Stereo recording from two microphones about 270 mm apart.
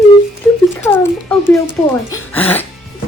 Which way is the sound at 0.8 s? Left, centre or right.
Centre.